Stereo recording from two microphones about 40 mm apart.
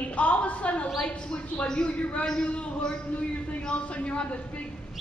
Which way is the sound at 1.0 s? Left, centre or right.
Left.